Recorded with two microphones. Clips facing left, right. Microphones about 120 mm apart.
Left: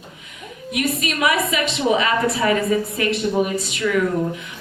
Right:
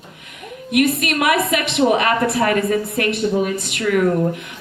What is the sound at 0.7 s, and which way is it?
Female singing, 60° right (ahead or behind).